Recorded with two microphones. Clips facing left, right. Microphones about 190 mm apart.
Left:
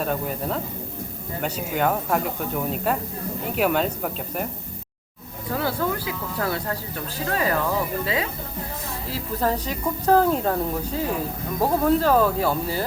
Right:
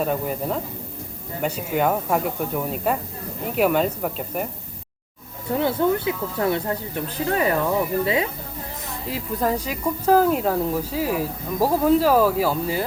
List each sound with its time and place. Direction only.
0.0 s speech: 5° right (ahead or behind)
5.5 s speech: 25° right (ahead or behind)
9.4 s speech: 10° right (ahead or behind)